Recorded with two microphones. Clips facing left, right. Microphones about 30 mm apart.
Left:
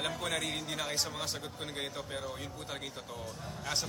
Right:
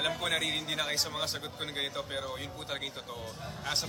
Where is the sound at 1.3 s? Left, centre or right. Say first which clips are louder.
Right 2 dB; right.